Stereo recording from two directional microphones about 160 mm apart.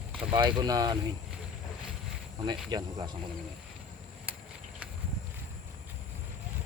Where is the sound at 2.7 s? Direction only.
25° right (ahead or behind).